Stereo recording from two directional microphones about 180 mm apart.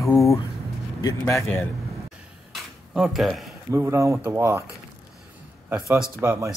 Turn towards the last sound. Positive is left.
turn(degrees=-15)  # may be behind; listen again after turning